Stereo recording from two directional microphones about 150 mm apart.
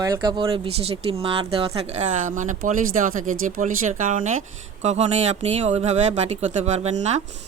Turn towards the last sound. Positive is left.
turn(degrees=-50)  # may be behind; listen again after turning